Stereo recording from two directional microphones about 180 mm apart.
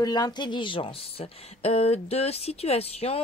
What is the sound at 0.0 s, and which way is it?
Speech, 20° left (ahead or behind).